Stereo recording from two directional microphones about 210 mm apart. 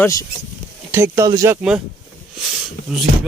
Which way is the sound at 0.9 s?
15° right (ahead or behind).